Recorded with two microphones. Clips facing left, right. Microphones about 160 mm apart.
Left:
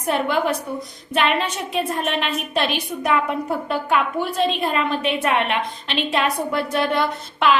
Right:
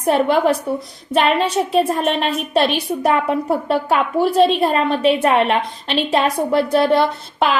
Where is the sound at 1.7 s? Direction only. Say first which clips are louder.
Right 4 dB; 40° right (ahead or behind).